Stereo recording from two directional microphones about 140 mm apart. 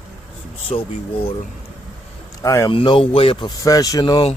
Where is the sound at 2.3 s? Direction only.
25° left (ahead or behind).